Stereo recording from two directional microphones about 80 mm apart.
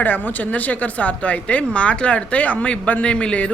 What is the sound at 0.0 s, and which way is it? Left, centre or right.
Speech, left.